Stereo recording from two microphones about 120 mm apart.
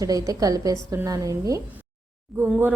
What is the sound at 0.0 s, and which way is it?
A woman's voice, 30° right (ahead or behind).